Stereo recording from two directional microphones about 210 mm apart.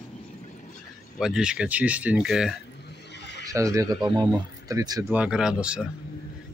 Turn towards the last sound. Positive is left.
turn(degrees=-5)  # may be behind; listen again after turning